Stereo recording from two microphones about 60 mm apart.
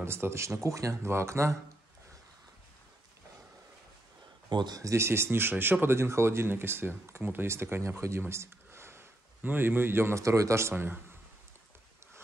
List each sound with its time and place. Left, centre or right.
0.0 s speech: right
0.7 s speech: right
4.9 s speech: right
8.3 s a sound: right
9.4 s speech: right
10.1 s speech: right
10.7 s speech: right